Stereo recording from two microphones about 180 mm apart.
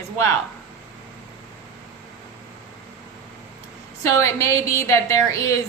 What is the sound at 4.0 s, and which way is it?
A woman's voice, 15° left (ahead or behind).